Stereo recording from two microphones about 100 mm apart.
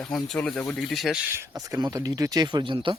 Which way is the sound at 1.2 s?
25° right (ahead or behind).